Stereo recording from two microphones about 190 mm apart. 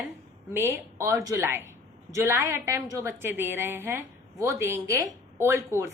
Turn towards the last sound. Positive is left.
turn(degrees=-15)  # may be behind; listen again after turning